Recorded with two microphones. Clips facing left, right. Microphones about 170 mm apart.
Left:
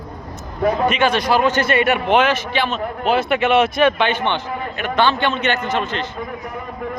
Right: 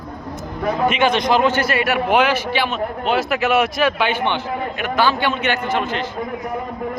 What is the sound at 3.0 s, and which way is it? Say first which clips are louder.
A man's voice: left 3 dB; centre (ahead or behind).